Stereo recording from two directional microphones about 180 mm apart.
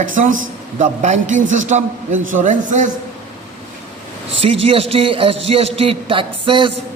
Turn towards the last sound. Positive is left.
turn(degrees=-30)  # may be behind; listen again after turning